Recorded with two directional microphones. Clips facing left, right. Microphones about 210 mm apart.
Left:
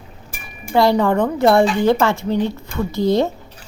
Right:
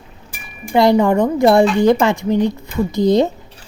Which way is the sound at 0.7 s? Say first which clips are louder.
Right 3 dB; 15° right (ahead or behind).